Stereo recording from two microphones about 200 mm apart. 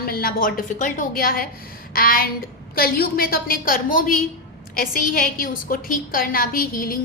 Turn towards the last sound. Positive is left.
turn(degrees=45)  # may be behind; listen again after turning